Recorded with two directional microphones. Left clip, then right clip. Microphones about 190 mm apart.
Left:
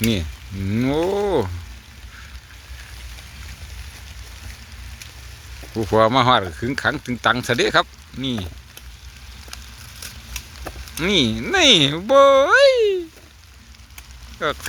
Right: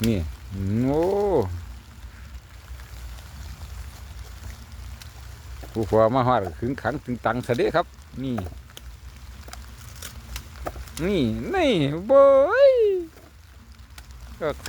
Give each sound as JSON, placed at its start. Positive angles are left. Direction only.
{"t": 0.0, "sound": "speech", "side_deg": 0}
{"t": 5.7, "sound": "speech", "side_deg": 10}
{"t": 10.9, "sound": "speech", "side_deg": 0}
{"t": 14.3, "sound": "speech", "side_deg": 0}